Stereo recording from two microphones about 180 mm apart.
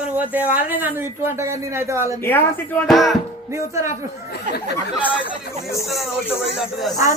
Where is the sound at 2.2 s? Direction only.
10° left (ahead or behind).